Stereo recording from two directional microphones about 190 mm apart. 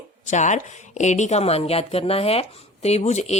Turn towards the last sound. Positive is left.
turn(degrees=35)  # may be behind; listen again after turning